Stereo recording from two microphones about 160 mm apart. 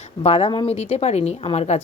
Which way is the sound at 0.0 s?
40° left (ahead or behind).